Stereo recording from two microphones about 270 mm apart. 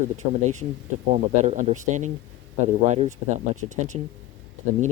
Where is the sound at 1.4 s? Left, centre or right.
Right.